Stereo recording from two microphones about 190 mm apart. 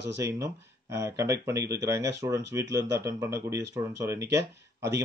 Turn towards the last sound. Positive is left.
turn(degrees=-15)  # may be behind; listen again after turning